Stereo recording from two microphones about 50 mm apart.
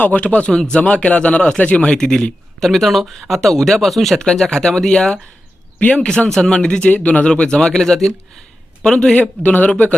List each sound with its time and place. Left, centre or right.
0.0 s a man's voice: left; by 4.2 s centre
4.2 s a man's voice: centre
9.4 s speech: left